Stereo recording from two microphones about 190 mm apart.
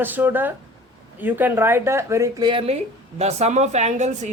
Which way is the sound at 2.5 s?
30° right (ahead or behind).